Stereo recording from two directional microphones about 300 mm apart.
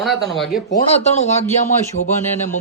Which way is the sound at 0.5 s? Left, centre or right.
Left.